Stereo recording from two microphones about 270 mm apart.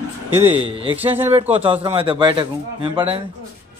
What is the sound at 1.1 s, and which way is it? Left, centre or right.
Speech, centre.